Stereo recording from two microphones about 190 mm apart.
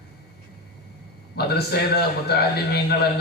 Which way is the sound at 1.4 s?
55° left (ahead or behind).